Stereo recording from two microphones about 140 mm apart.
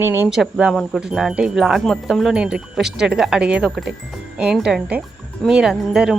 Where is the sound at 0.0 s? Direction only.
15° right (ahead or behind).